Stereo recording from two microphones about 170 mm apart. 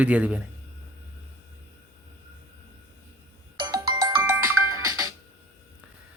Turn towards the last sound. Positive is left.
turn(degrees=-20)  # may be behind; listen again after turning